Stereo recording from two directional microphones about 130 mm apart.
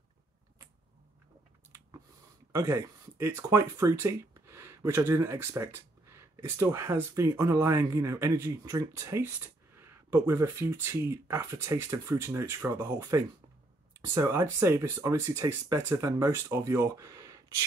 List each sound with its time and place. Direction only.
2.5 s speech: 20° right (ahead or behind)